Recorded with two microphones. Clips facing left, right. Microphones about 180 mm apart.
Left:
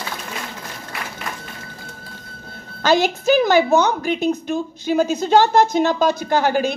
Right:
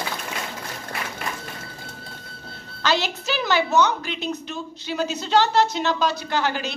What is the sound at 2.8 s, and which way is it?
A woman's voice, 50° left (ahead or behind).